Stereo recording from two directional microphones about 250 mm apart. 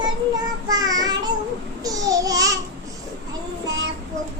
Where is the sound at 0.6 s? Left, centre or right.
Centre.